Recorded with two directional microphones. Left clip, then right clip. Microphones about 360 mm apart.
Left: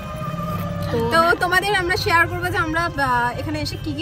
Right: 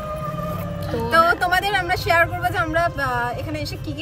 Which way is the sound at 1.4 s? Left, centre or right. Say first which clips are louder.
Left 1 dB; centre.